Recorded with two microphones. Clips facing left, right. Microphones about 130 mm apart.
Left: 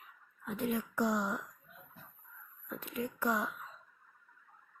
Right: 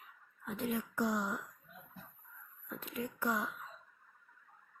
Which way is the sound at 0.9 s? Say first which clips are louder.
Left 2 dB; 90° left.